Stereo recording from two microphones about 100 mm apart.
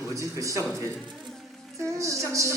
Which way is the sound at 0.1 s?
30° right (ahead or behind).